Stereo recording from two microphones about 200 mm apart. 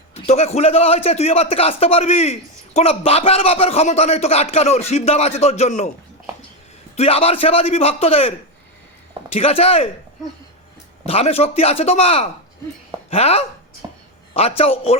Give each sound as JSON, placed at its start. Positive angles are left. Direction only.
{"t": 0.1, "sound": "a man's voice", "side_deg": 30}
{"t": 6.9, "sound": "a man's voice", "side_deg": 30}
{"t": 9.3, "sound": "a man's voice", "side_deg": 30}
{"t": 11.0, "sound": "a man's voice", "side_deg": 30}
{"t": 13.8, "sound": "a sound", "side_deg": -20}
{"t": 14.3, "sound": "a man's voice", "side_deg": 30}